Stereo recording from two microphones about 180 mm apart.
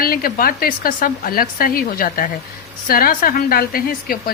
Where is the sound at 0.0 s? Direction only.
55° left (ahead or behind).